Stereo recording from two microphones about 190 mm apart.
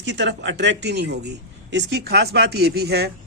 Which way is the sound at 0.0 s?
65° right (ahead or behind).